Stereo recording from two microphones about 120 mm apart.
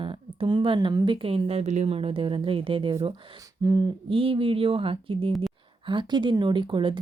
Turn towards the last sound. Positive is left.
turn(degrees=-45)  # may be behind; listen again after turning